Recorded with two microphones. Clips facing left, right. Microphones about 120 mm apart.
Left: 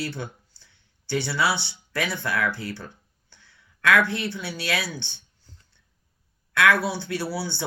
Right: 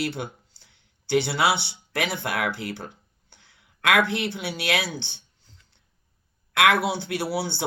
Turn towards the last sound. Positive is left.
turn(degrees=-60)  # may be behind; listen again after turning